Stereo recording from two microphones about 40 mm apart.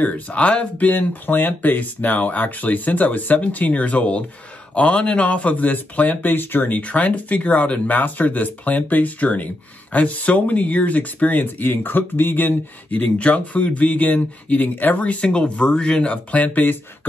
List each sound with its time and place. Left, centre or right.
0.0 s speech: left
6.3 s speech: left
6.8 s speech: left
13.2 s speech: left
15.2 s speech: left
16.1 s speech: left